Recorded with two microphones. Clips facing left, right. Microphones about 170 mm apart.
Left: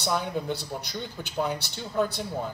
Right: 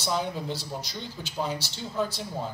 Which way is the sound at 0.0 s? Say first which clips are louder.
Left 1 dB; 60° left (ahead or behind).